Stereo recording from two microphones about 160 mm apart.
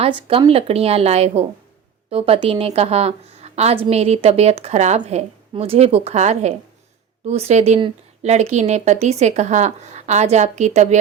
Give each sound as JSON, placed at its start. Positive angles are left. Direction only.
{"t": 0.0, "sound": "a woman's voice", "side_deg": -35}